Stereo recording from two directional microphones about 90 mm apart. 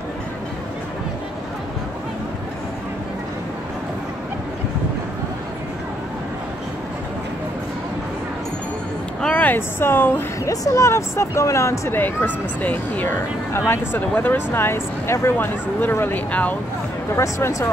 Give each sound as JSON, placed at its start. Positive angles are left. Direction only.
{"t": 9.2, "sound": "speech", "side_deg": 15}
{"t": 10.5, "sound": "speech", "side_deg": 40}
{"t": 17.1, "sound": "speech", "side_deg": 30}